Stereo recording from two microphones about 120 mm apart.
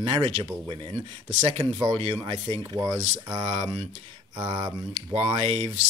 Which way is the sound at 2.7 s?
30° right (ahead or behind).